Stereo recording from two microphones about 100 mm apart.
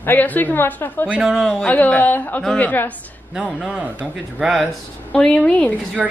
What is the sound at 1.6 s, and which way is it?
A woman's voice, 15° left (ahead or behind).